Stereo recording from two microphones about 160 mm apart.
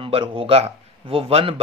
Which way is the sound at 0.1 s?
35° right (ahead or behind).